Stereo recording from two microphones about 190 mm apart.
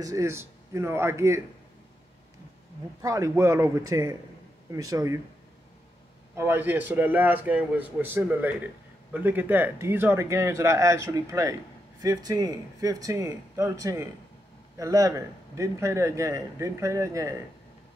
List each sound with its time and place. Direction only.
0.0 s a man's voice: 15° right (ahead or behind)
3.0 s a man's voice: 15° right (ahead or behind)
6.3 s a man's voice: 10° right (ahead or behind)